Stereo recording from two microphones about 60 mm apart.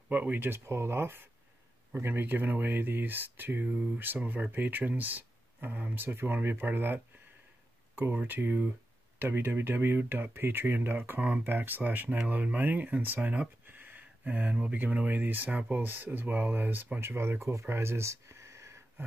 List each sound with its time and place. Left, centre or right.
0.1 s speech: right
0.7 s speech: right